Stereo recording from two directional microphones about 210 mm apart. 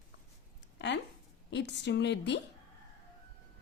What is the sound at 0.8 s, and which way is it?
A woman's voice, 55° left (ahead or behind).